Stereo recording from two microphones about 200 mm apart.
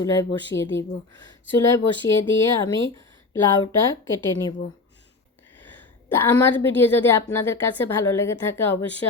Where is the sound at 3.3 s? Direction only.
15° left (ahead or behind).